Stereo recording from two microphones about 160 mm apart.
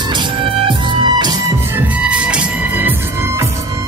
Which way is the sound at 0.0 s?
30° right (ahead or behind).